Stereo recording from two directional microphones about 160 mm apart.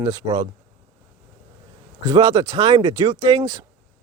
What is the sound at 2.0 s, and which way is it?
Speech, 25° right (ahead or behind).